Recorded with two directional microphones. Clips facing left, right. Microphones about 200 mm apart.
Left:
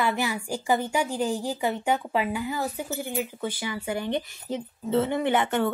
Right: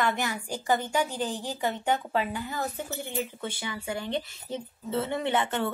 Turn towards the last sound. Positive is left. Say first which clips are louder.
# left 4 dB
turn(degrees=15)  # may be behind; listen again after turning